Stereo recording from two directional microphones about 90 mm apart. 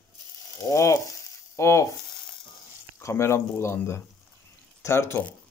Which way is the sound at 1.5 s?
35° left (ahead or behind).